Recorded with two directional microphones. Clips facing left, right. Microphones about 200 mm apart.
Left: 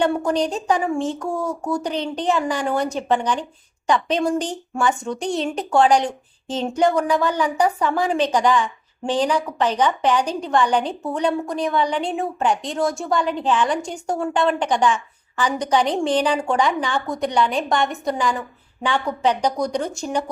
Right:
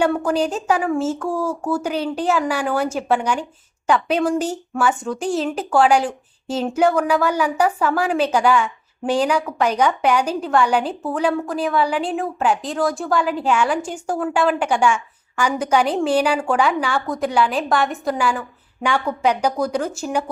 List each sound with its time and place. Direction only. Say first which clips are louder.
0.0 s a woman's voice: right 1 dB; 5° right (ahead or behind)
1.2 s speech: right 2 dB; 20° left (ahead or behind)
1.5 s a woman's voice: right 2 dB; 5° right (ahead or behind)